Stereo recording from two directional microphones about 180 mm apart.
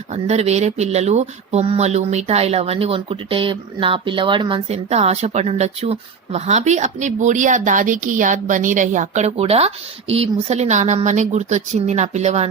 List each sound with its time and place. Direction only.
0.1 s speech: 35° right (ahead or behind)